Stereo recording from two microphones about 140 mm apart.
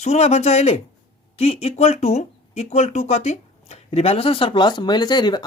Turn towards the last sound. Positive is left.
turn(degrees=30)  # may be behind; listen again after turning